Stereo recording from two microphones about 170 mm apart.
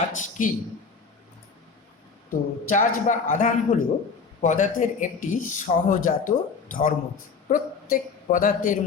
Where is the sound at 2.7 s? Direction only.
50° left (ahead or behind).